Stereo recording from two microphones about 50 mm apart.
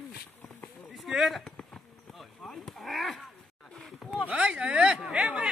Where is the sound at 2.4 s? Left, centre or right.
Centre.